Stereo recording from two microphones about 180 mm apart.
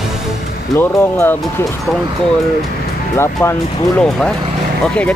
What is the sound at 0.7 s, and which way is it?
Speech, 10° left (ahead or behind).